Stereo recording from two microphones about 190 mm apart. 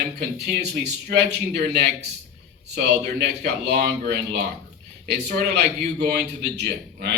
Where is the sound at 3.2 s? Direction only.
60° right (ahead or behind).